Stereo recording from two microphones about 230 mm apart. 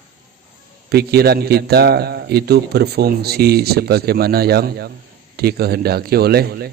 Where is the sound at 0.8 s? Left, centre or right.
Right.